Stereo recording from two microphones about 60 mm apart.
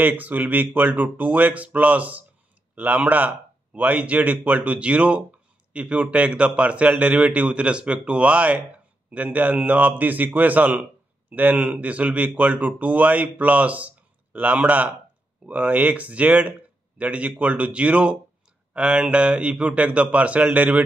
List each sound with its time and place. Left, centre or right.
0.0 s a man's voice: right